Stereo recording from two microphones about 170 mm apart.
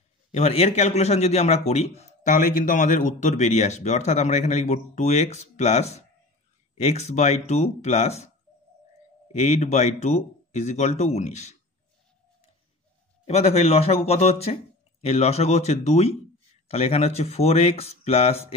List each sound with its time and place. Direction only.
0.3 s a man's voice: 40° left (ahead or behind)
9.4 s a man's voice: 40° left (ahead or behind)
13.3 s a man's voice: 40° left (ahead or behind)